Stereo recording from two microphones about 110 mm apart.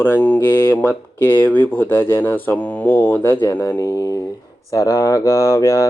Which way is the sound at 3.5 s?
35° left (ahead or behind).